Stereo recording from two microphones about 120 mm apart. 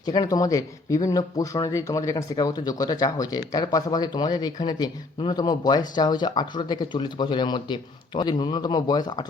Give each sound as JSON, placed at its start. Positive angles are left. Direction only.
{"t": 0.0, "sound": "speech", "side_deg": 35}